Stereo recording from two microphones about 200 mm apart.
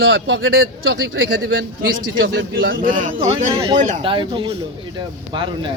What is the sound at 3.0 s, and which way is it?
Speech, 35° right (ahead or behind).